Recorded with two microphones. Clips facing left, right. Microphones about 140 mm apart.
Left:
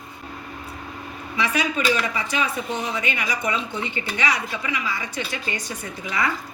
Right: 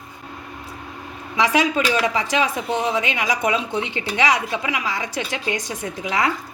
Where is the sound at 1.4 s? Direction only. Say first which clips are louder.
Right 5 dB; 90° right.